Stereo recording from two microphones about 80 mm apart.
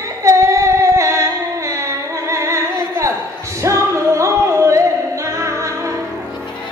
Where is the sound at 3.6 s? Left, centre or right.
Right.